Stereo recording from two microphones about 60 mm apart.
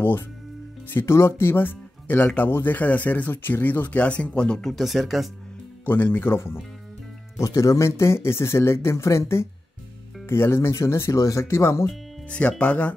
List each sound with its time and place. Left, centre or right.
0.8 s speech: left; by 4.7 s centre
4.7 s speech: centre
5.9 s speech: left
7.3 s speech: left
12.3 s speech: left